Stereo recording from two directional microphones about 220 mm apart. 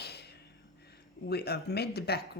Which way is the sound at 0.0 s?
45° left (ahead or behind).